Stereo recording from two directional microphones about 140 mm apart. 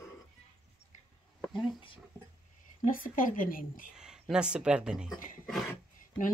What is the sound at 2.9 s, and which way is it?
A woman's voice, 80° left.